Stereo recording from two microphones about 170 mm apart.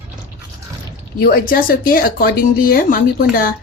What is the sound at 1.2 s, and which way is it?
A woman's voice, 60° left (ahead or behind).